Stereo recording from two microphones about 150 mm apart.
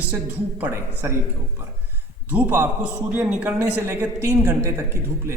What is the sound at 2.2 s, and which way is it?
A man's voice, 10° right (ahead or behind).